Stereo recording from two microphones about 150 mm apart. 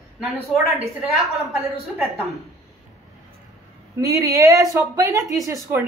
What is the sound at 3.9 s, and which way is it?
Speech, 20° right (ahead or behind).